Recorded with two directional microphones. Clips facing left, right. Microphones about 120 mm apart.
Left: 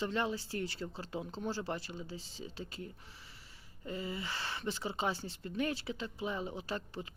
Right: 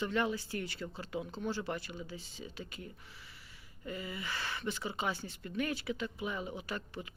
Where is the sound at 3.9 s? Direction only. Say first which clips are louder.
Left 1 dB; 30° left (ahead or behind).